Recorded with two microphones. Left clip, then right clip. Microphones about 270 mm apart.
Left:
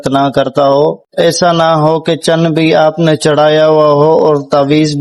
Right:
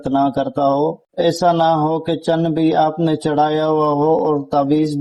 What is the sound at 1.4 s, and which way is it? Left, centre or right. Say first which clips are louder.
A man's voice: left 4 dB; left.